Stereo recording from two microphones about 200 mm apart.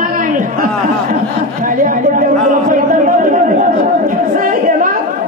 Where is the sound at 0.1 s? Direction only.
40° right (ahead or behind).